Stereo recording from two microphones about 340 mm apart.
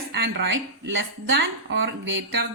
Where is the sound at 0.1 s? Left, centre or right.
Right.